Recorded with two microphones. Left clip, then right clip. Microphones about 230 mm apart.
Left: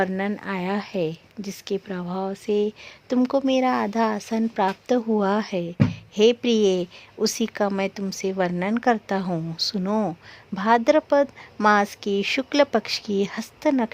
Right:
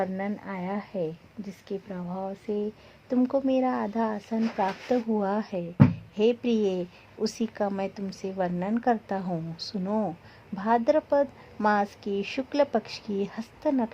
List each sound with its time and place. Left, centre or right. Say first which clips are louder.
0.0 s a woman's voice: left 6 dB; left